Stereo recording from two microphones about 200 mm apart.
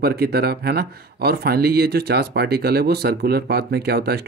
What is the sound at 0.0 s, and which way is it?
Speech, 50° right (ahead or behind).